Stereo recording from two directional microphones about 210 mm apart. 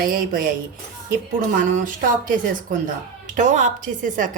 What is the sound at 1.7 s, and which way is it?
A woman's voice, 40° right (ahead or behind).